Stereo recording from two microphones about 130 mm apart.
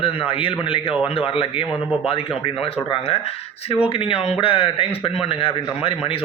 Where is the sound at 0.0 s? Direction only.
40° left (ahead or behind).